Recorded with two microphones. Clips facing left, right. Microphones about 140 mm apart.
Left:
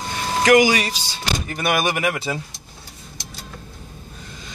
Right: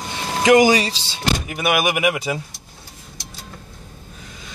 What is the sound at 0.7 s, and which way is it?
Speech, 25° right (ahead or behind).